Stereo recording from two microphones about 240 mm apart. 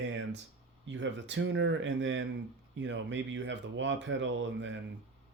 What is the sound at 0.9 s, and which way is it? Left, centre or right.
Speech, right.